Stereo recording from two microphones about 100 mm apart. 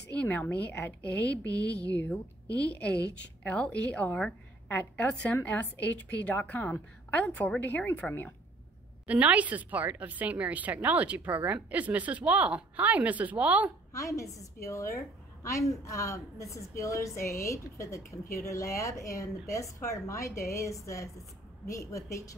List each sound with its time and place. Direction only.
0.2 s a woman's voice: 15° left (ahead or behind)
9.0 s speech: 15° right (ahead or behind)
13.9 s a woman's voice: 30° left (ahead or behind)